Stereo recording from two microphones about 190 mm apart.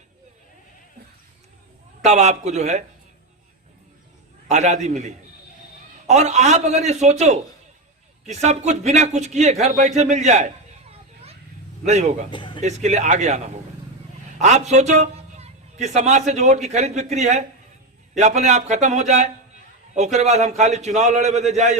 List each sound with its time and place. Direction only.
2.0 s a man's voice: 35° right (ahead or behind)
4.4 s a man's voice: 35° right (ahead or behind)
11.9 s a man's voice: 35° right (ahead or behind)
12.3 s a man's voice: 25° left (ahead or behind)
12.6 s a man's voice: 35° right (ahead or behind)